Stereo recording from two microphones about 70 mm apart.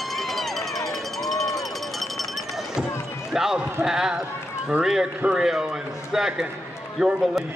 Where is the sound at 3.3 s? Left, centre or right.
Centre.